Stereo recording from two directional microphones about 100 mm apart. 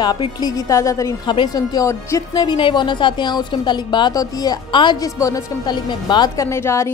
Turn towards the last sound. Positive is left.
turn(degrees=30)  # may be behind; listen again after turning